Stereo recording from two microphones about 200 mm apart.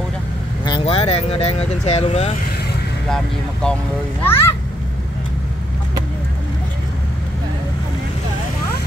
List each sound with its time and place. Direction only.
0.7 s speech: 25° left (ahead or behind)
4.2 s a child's voice: 10° left (ahead or behind)